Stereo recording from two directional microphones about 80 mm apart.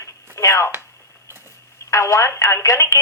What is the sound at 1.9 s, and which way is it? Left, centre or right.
Speech, left.